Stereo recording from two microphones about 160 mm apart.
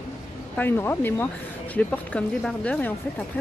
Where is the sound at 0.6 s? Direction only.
15° left (ahead or behind).